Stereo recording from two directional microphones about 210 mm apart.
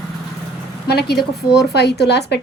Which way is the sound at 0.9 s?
50° left (ahead or behind).